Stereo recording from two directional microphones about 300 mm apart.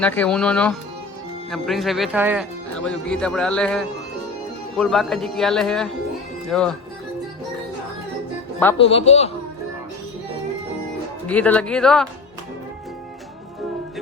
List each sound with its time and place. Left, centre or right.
0.0 s speech: centre
8.8 s a man's voice: centre
11.3 s speech: centre